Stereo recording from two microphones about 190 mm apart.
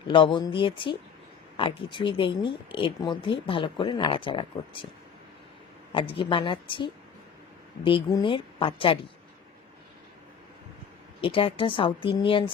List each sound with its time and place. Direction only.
0.1 s speech: 25° left (ahead or behind)
5.9 s speech: 30° left (ahead or behind)
11.2 s speech: 30° left (ahead or behind)